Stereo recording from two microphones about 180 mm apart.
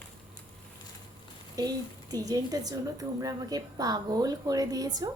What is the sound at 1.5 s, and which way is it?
A woman's voice, 20° right (ahead or behind).